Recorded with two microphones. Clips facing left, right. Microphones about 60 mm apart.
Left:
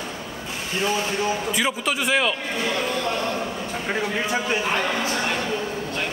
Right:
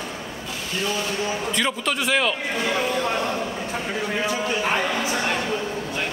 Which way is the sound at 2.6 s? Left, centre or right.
Centre.